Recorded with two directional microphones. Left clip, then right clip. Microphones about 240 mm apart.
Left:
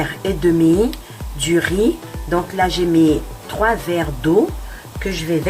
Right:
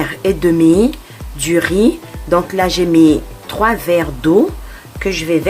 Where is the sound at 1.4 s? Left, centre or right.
Right.